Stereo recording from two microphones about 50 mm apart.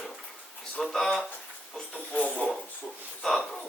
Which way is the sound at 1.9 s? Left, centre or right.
Left.